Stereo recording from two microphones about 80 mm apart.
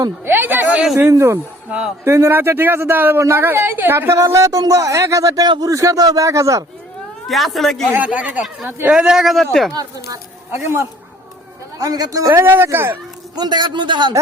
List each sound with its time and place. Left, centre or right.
0.3 s speech: right
1.1 s a man's voice: right
7.3 s a man's voice: centre
7.9 s a man's voice: centre
9.7 s a man's voice: right
10.5 s speech: right
11.8 s a man's voice: right
12.3 s speech: right
13.3 s a man's voice: right